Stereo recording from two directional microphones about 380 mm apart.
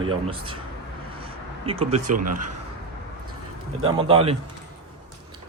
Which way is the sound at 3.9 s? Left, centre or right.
Centre.